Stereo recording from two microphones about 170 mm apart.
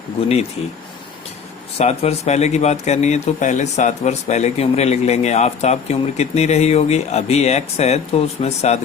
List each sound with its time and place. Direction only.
1.8 s speech: 40° left (ahead or behind)